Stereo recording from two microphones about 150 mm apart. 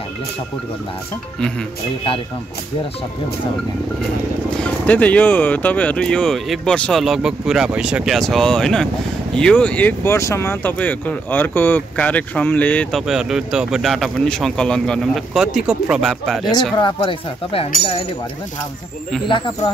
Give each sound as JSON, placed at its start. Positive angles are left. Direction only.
{"t": 4.6, "sound": "speech", "side_deg": 10}
{"t": 13.0, "sound": "speech", "side_deg": -5}
{"t": 16.7, "sound": "speech", "side_deg": 30}
{"t": 19.2, "sound": "speech", "side_deg": 30}